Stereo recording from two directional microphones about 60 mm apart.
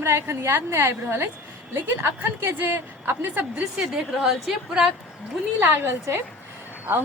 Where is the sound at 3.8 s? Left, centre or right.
Centre.